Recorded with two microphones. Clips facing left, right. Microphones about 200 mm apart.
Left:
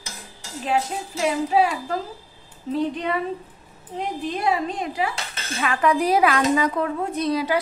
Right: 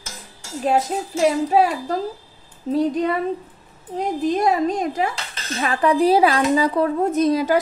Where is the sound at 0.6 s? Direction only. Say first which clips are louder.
Right 4 dB; 40° right (ahead or behind).